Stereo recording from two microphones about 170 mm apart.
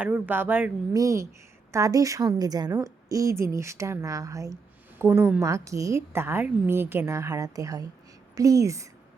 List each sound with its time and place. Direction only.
0.0 s a woman's voice: 10° right (ahead or behind)